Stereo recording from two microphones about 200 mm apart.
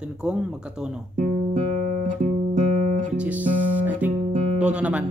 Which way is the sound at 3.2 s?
5° right (ahead or behind).